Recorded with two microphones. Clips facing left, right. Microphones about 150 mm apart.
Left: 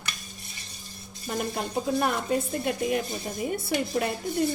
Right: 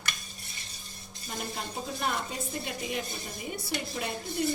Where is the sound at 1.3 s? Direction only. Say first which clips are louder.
Left 8 dB; 50° left (ahead or behind).